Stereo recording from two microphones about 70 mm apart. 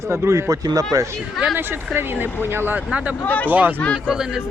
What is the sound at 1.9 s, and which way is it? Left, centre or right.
Speech, right.